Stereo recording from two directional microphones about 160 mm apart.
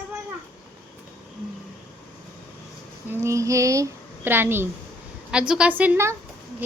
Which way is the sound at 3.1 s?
20° right (ahead or behind).